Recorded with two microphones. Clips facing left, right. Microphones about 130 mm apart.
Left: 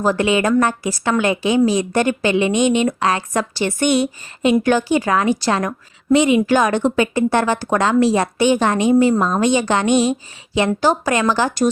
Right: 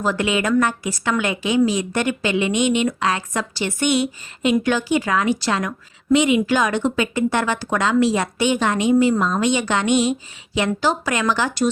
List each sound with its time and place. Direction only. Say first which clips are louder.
0.0 s a woman's voice: left 4 dB; 35° left (ahead or behind)